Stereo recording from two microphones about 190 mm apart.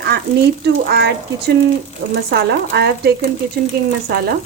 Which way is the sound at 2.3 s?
60° right (ahead or behind).